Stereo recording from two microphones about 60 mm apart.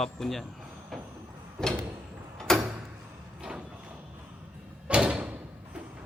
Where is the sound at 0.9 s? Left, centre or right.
Centre.